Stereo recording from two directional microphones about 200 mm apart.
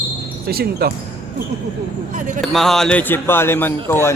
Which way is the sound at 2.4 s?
Centre (ahead or behind).